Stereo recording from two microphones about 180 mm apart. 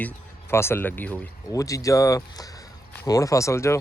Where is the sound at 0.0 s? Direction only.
15° left (ahead or behind).